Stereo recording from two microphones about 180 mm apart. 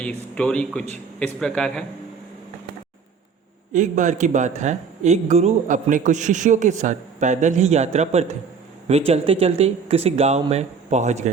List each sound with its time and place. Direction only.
0.0 s speech: 5° left (ahead or behind)
3.7 s speech: 45° right (ahead or behind)